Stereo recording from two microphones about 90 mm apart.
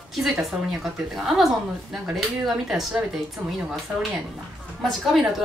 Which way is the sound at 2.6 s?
5° right (ahead or behind).